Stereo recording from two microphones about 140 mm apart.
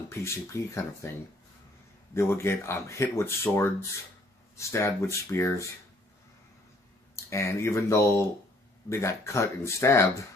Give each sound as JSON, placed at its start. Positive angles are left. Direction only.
{"t": 0.1, "sound": "speech", "side_deg": 20}
{"t": 2.1, "sound": "speech", "side_deg": 20}
{"t": 7.2, "sound": "speech", "side_deg": 20}